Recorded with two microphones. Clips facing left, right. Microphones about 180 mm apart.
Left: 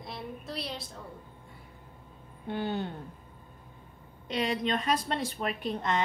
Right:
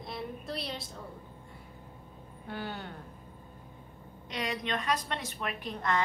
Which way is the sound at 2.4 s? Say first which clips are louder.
Left 7 dB; 25° left (ahead or behind).